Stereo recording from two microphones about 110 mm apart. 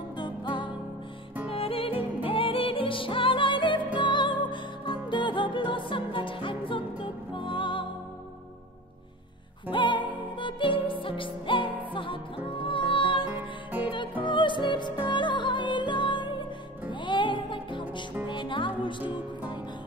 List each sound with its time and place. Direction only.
0.1 s music: 45° left (ahead or behind)
1.5 s music: 60° left (ahead or behind)
9.7 s music: 45° left (ahead or behind)
13.3 s music: 15° right (ahead or behind)
14.2 s music: 45° left (ahead or behind)